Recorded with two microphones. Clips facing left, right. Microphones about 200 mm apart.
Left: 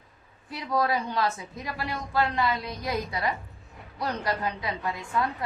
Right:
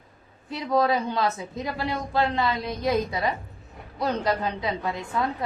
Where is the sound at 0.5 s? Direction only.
25° right (ahead or behind).